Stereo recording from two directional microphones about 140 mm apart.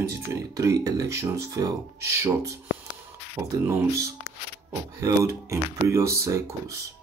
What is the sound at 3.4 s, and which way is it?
Speech, 20° right (ahead or behind).